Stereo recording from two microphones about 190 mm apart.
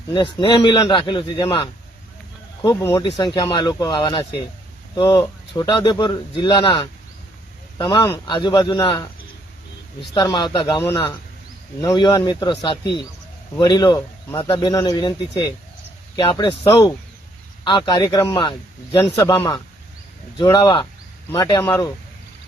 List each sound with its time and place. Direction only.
0.1 s speech: 25° left (ahead or behind)
10.2 s speech: 25° left (ahead or behind)